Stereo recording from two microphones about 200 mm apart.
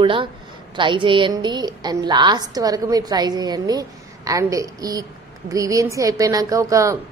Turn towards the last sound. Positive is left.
turn(degrees=-15)  # may be behind; listen again after turning